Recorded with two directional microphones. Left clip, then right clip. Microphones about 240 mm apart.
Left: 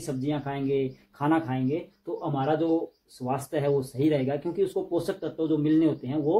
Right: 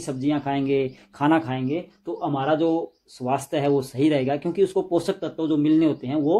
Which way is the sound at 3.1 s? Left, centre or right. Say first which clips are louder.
Right 5 dB; right.